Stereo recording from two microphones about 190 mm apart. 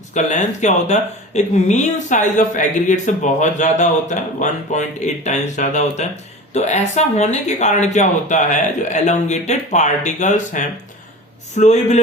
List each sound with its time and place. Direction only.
0.1 s speech: 40° left (ahead or behind)